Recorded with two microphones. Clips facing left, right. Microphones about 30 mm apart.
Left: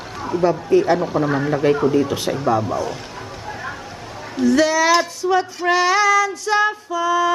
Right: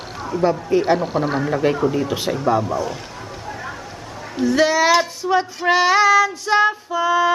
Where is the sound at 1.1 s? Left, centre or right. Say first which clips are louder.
Left 1 dB; right.